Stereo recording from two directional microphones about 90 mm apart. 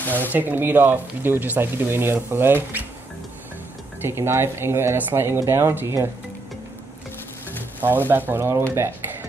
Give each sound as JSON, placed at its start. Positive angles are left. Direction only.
{"t": 0.3, "sound": "speech", "side_deg": -20}
{"t": 4.0, "sound": "speech", "side_deg": -30}
{"t": 7.8, "sound": "speech", "side_deg": -20}